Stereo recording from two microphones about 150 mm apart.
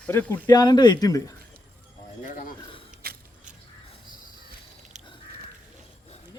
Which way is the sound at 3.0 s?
85° right.